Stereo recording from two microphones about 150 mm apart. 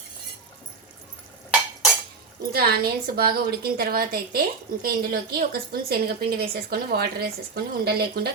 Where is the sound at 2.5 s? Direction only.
90° right.